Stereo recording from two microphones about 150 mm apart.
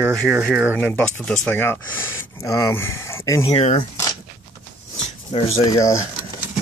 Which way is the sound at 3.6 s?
45° left (ahead or behind).